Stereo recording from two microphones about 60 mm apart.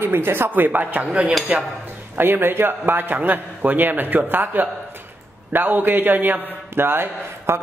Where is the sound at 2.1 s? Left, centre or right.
Right.